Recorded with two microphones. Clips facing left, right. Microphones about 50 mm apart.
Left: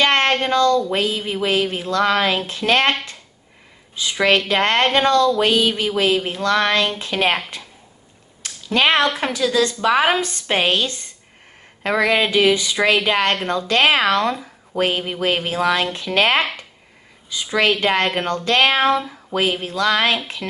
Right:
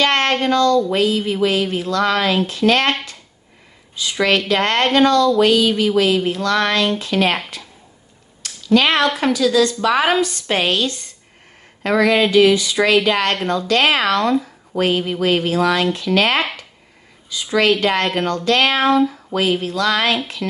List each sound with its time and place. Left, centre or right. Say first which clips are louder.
0.0 s child singing: even; left
0.9 s speech: right 4 dB; left
3.9 s speech: even; left
8.6 s speech: right 2 dB; centre
17.5 s speech: right 2 dB; left